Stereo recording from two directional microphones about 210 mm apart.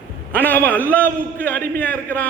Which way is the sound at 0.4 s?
10° left (ahead or behind).